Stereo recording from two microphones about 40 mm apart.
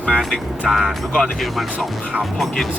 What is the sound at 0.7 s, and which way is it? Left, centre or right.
Speech, centre.